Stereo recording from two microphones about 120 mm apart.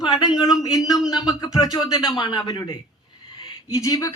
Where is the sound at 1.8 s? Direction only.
5° right (ahead or behind).